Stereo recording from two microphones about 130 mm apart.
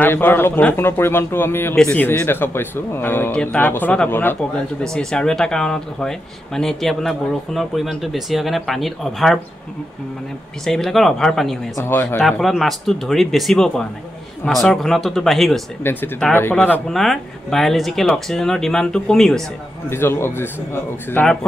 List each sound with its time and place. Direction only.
0.0 s speech: 15° left (ahead or behind)
10.6 s speech: 5° left (ahead or behind)
11.7 s speech: 20° left (ahead or behind)
12.2 s speech: centre (ahead or behind)
15.8 s speech: 15° left (ahead or behind)
16.9 s speech: centre (ahead or behind)
19.9 s speech: 15° left (ahead or behind)